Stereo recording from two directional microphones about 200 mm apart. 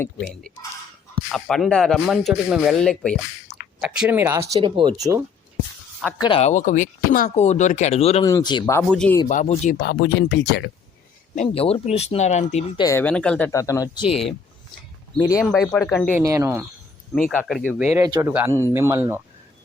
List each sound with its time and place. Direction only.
0.0 s speech: 5° left (ahead or behind); by 5.2 s 20° right (ahead or behind)
6.2 s speech: 30° left (ahead or behind)
8.2 s speech: 20° left (ahead or behind)
8.9 s speech: 5° left (ahead or behind)
9.3 s speech: 35° left (ahead or behind)
9.7 s speech: 55° left (ahead or behind)
11.3 s speech: 30° left (ahead or behind)
12.8 s speech: 10° left (ahead or behind)
15.4 s speech: centre (ahead or behind)
16.1 s speech: 15° right (ahead or behind)
17.2 s speech: centre (ahead or behind)
17.9 s speech: 15° right (ahead or behind)